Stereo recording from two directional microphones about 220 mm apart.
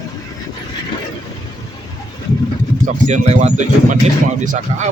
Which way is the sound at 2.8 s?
35° right (ahead or behind).